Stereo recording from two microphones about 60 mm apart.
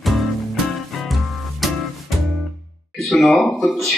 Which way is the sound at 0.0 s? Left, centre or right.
Centre.